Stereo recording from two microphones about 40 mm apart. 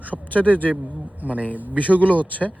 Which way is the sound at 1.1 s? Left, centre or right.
Right.